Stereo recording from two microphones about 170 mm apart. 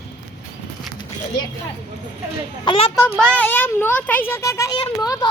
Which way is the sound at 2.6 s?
30° left (ahead or behind).